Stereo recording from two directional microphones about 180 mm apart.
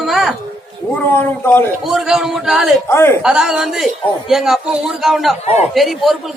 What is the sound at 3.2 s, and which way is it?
A man's voice, 5° right (ahead or behind).